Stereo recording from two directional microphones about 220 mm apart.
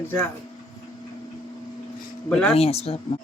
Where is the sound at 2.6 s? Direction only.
25° left (ahead or behind).